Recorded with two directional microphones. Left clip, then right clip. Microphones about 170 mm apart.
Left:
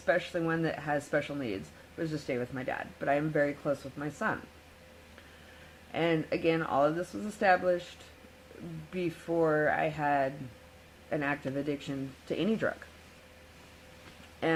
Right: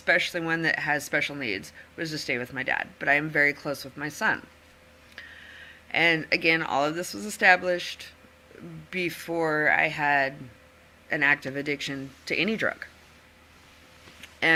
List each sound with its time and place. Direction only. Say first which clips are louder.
0.0 s speech: right 5 dB; 10° right (ahead or behind)
3.6 s speech: right 1 dB; 20° right (ahead or behind)
5.9 s speech: right 7 dB; 5° right (ahead or behind)
8.9 s speech: right 6 dB; 5° right (ahead or behind)
9.2 s speech: right 2 dB; 15° right (ahead or behind)
9.7 s speech: right 6 dB; 5° right (ahead or behind)